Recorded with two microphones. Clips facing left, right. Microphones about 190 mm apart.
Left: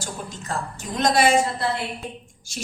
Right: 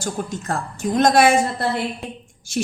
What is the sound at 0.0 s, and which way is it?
A woman's voice, 50° right (ahead or behind).